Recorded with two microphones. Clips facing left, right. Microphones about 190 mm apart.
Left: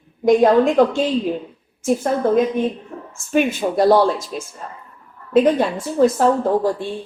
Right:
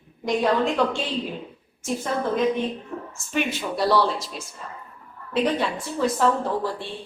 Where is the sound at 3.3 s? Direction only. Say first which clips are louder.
Left 8 dB; 50° left (ahead or behind).